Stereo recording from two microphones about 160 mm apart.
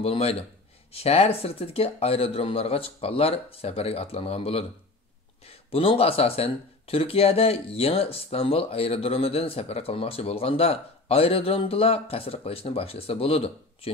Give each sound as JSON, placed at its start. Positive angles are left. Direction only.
{"t": 0.0, "sound": "speech", "side_deg": 40}